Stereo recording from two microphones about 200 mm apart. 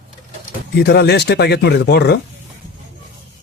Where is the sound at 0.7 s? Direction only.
55° left (ahead or behind).